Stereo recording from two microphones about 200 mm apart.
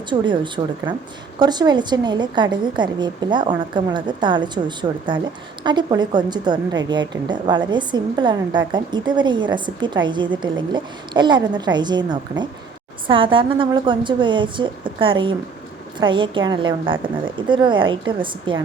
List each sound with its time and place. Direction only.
0.1 s a woman's voice: 25° right (ahead or behind)